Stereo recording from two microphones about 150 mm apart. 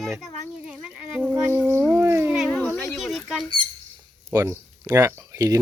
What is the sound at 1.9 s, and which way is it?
Cat, 15° right (ahead or behind).